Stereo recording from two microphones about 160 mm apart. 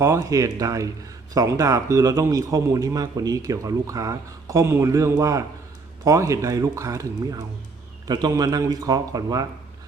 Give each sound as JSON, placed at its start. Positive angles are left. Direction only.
{"t": 0.0, "sound": "a man's voice", "side_deg": -20}